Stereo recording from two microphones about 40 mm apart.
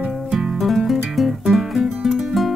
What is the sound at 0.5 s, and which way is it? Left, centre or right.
Music, centre.